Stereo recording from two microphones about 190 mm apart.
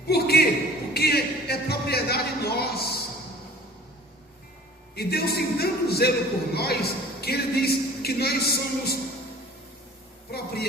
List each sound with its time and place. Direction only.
0.1 s a man's voice: 55° left (ahead or behind)
0.9 s a sound: 55° left (ahead or behind)
4.9 s a man's voice: 55° left (ahead or behind)
10.3 s a man's voice: 55° left (ahead or behind)